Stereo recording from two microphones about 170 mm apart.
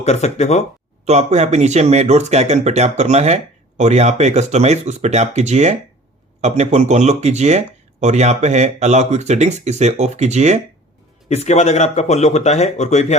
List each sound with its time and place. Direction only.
0.0 s speech: 40° left (ahead or behind)
1.0 s speech: 40° right (ahead or behind)
11.3 s speech: 40° left (ahead or behind)